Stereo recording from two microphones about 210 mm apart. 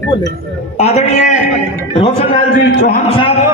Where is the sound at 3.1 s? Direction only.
25° left (ahead or behind).